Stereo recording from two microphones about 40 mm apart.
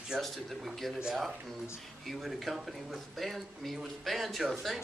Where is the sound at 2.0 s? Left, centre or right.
Centre.